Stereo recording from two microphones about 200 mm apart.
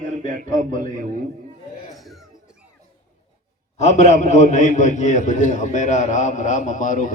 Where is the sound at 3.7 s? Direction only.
35° left (ahead or behind).